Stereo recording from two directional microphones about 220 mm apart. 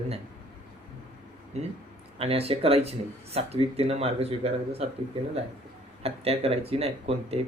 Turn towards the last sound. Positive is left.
turn(degrees=-25)  # may be behind; listen again after turning